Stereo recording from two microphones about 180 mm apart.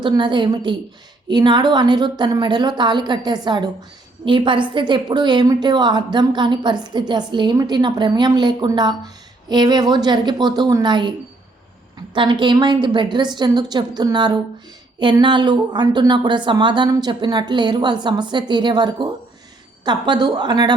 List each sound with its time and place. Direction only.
0.0 s a woman's voice: 25° right (ahead or behind)
12.1 s a woman's voice: 25° right (ahead or behind)